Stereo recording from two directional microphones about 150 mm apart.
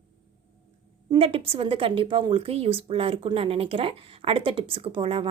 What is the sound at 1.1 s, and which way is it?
A woman's voice, 40° right (ahead or behind).